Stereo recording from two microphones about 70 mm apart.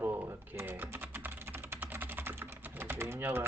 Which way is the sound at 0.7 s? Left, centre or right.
Right.